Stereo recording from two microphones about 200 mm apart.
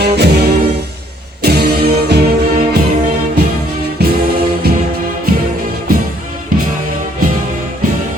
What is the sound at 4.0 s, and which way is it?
Music, 55° right (ahead or behind).